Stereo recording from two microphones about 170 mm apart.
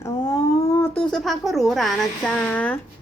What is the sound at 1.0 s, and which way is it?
Speech, 5° left (ahead or behind).